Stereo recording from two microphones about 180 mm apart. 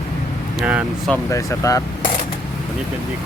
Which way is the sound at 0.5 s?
5° right (ahead or behind).